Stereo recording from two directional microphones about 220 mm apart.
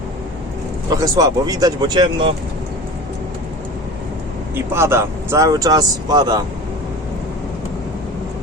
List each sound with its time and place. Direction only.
0.9 s speech: 15° right (ahead or behind)
4.5 s speech: 10° right (ahead or behind)